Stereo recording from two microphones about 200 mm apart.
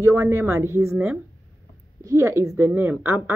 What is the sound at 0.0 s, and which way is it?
A woman's voice, 15° right (ahead or behind).